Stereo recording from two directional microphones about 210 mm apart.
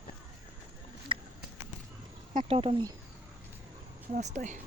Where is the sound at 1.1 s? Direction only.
25° right (ahead or behind).